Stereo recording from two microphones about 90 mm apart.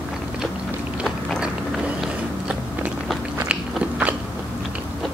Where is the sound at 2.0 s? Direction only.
15° right (ahead or behind).